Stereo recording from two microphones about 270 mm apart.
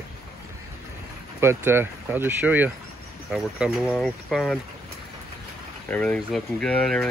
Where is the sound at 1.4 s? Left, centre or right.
Centre.